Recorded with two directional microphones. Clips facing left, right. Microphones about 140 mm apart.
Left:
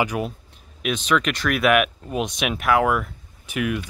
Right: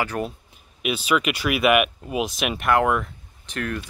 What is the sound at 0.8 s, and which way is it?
Speech, 5° right (ahead or behind).